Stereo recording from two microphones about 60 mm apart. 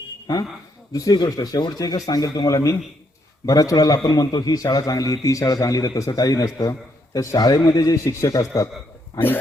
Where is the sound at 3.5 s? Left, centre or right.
Left.